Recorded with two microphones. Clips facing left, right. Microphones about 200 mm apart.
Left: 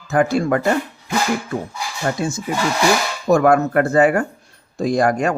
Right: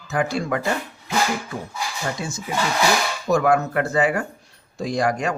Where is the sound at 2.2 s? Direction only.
50° left (ahead or behind).